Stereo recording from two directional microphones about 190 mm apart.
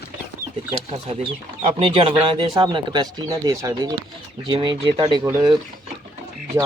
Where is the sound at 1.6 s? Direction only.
30° right (ahead or behind).